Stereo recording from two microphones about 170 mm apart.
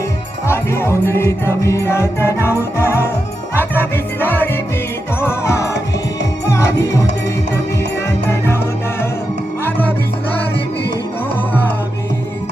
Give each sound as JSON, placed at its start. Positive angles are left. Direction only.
{"t": 0.4, "sound": "music", "side_deg": 15}
{"t": 9.6, "sound": "music", "side_deg": 10}